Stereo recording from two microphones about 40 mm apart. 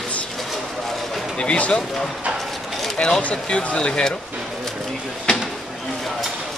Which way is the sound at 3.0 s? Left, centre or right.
Centre.